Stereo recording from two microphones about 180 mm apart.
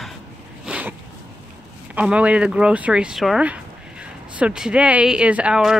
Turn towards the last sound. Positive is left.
turn(degrees=-5)  # may be behind; listen again after turning